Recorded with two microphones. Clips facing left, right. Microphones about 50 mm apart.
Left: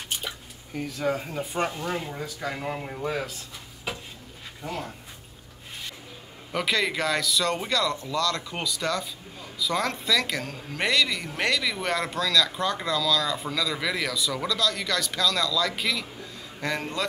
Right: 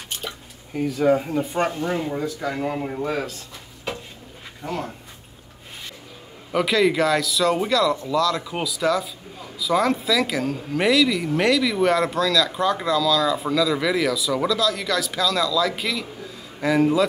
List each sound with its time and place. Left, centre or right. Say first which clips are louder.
0.7 s speech: right 8 dB; centre
1.6 s speech: right 3 dB; right
2.5 s speech: right 6 dB; centre
4.6 s speech: right 5 dB; centre
6.5 s speech: right 7 dB; centre